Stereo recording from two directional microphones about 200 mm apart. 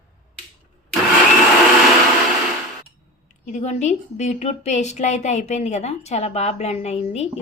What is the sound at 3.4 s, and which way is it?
A woman's voice, 35° left (ahead or behind).